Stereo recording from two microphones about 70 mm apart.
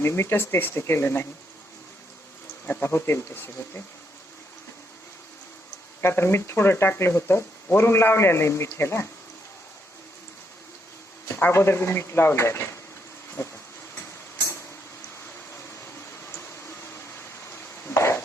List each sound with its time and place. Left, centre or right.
0.0 s speech: left
2.8 s speech: left
6.0 s speech: left
11.3 s speech: left
13.9 s a sound: left
17.8 s a sound: left